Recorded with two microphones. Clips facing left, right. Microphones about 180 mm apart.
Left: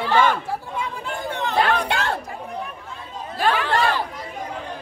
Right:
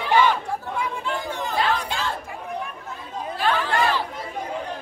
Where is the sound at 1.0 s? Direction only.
50° left (ahead or behind).